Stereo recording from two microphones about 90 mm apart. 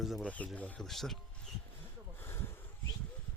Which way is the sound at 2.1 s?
25° left (ahead or behind).